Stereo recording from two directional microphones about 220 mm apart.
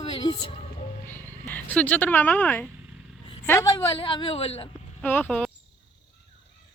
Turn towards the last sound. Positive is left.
turn(degrees=5)  # may be behind; listen again after turning